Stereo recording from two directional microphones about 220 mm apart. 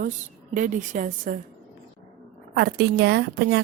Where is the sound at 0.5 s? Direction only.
35° right (ahead or behind).